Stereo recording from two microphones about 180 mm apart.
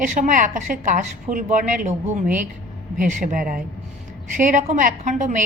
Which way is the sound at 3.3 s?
50° right (ahead or behind).